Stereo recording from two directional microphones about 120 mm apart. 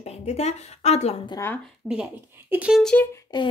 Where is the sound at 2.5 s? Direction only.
10° right (ahead or behind).